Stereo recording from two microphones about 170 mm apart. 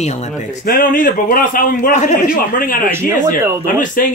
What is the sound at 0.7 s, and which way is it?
Speech, 55° left (ahead or behind).